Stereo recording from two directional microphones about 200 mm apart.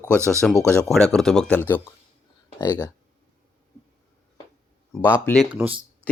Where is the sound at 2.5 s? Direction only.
20° left (ahead or behind).